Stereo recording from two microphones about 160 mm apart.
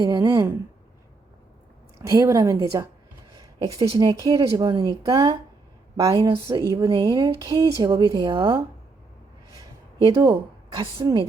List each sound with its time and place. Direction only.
0.0 s speech: 25° right (ahead or behind)
2.0 s speech: 20° right (ahead or behind)
3.3 s a sound: 25° right (ahead or behind)
3.9 s speech: 25° right (ahead or behind)
10.2 s speech: 25° right (ahead or behind)